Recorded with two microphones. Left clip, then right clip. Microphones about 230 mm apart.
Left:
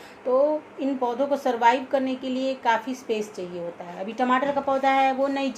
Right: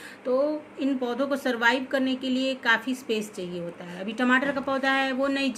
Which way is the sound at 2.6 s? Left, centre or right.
Right.